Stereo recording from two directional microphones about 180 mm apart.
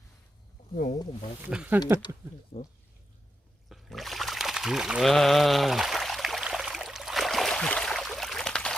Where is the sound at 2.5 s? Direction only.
35° left (ahead or behind).